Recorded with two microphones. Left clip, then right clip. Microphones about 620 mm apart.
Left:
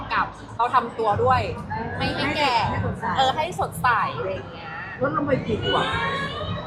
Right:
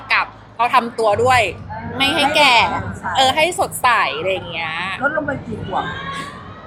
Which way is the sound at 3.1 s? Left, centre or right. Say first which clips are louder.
Right 8 dB; right.